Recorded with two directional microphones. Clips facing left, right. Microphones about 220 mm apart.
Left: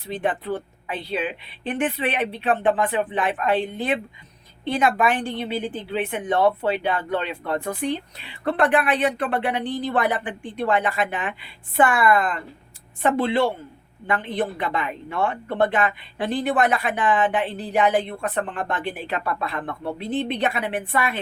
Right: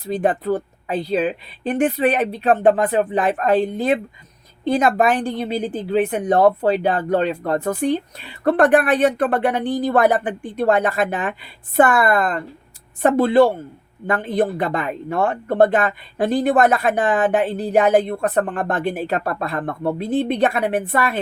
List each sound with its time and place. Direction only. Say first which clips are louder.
0.0 s a woman's voice: right 6 dB; 40° right (ahead or behind)